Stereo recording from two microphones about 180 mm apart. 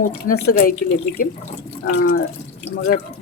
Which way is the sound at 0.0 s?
55° left (ahead or behind).